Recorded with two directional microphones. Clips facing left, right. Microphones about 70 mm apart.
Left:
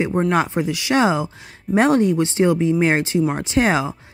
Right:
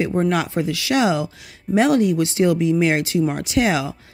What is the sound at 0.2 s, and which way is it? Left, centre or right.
Speech, left.